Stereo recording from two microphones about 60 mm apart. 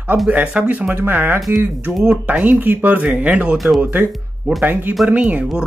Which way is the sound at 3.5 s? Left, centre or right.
Centre.